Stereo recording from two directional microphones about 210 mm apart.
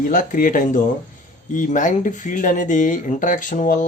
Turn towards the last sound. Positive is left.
turn(degrees=35)  # may be behind; listen again after turning